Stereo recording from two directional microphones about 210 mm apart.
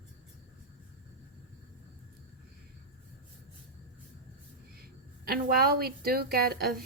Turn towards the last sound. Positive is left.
turn(degrees=-45)  # may be behind; listen again after turning